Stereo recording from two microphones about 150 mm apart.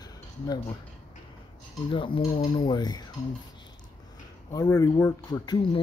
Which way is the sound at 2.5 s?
30° left (ahead or behind).